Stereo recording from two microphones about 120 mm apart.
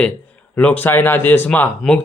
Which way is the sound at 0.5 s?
15° left (ahead or behind).